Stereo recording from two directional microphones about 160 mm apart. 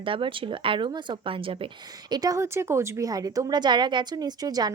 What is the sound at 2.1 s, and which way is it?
A woman's voice, 20° right (ahead or behind).